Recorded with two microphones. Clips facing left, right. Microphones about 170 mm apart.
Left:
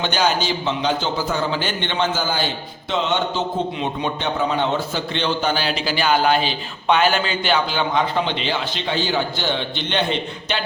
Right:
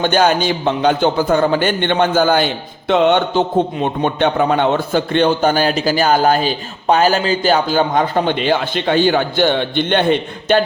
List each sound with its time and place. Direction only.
0.0 s a man's voice: 50° right (ahead or behind)